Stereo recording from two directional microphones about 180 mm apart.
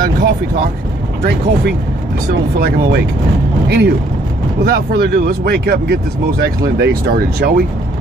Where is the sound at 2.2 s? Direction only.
60° right (ahead or behind).